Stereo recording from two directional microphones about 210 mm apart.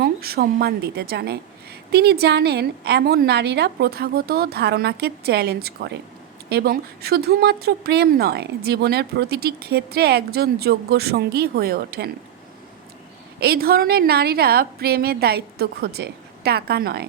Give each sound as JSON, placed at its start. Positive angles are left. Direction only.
{"t": 0.0, "sound": "speech", "side_deg": -50}
{"t": 13.4, "sound": "speech", "side_deg": -45}